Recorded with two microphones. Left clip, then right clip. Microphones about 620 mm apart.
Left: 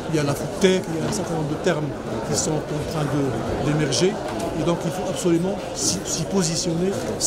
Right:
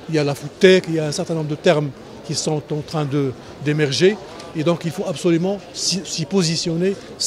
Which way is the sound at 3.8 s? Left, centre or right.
Right.